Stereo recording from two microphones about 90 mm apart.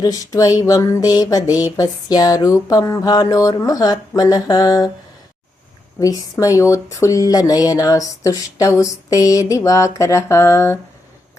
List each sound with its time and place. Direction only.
0.0 s speech: 40° left (ahead or behind)
6.4 s speech: 40° left (ahead or behind)